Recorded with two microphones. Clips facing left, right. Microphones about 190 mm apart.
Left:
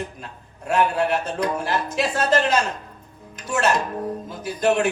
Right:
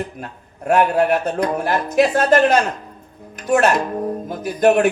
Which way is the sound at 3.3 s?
60° right (ahead or behind).